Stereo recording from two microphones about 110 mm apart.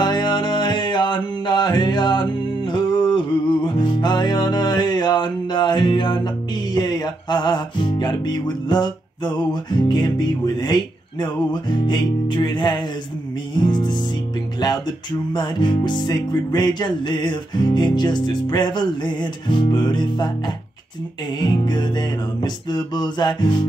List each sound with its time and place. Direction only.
0.0 s music: 40° left (ahead or behind)
15.3 s music: 45° left (ahead or behind)
21.4 s music: 40° left (ahead or behind)